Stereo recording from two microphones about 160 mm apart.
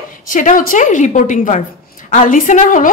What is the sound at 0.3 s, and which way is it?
A woman's voice, 55° left (ahead or behind).